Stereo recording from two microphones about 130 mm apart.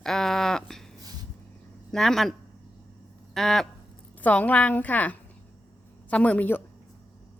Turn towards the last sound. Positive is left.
turn(degrees=10)  # may be behind; listen again after turning